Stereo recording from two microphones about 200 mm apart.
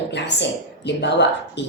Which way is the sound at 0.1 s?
60° left (ahead or behind).